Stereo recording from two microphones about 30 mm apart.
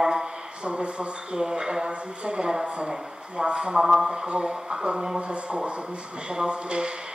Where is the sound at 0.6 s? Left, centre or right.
Right.